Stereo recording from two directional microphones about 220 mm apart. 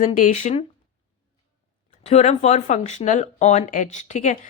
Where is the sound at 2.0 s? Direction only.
30° left (ahead or behind).